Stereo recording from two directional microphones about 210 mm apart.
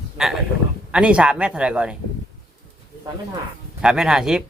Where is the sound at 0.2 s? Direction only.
5° right (ahead or behind).